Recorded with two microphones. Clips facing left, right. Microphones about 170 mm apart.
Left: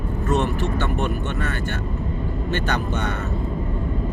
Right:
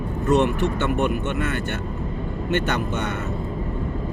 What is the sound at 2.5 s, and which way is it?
Speech, 20° right (ahead or behind).